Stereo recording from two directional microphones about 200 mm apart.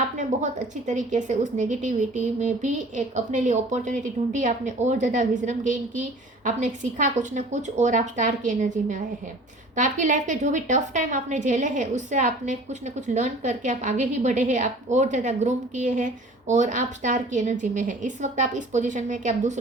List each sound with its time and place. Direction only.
0.2 s a woman's voice: 40° right (ahead or behind)